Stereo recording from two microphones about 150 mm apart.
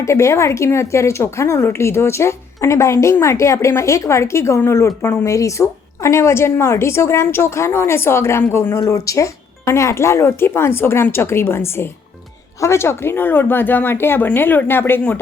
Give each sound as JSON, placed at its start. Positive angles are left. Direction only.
{"t": 0.0, "sound": "a woman's voice", "side_deg": 20}